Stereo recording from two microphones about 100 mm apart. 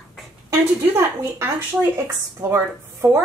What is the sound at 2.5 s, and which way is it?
Speech, 25° right (ahead or behind).